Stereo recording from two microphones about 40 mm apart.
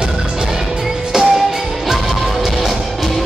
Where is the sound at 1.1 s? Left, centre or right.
Centre.